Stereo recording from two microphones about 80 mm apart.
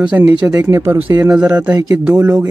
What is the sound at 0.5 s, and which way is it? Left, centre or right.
Speech, right.